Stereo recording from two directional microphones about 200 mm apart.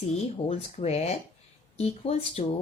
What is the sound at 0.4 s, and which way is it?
Speech, 30° left (ahead or behind).